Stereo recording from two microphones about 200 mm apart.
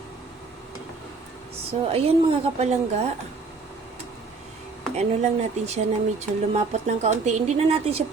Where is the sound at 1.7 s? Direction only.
30° right (ahead or behind).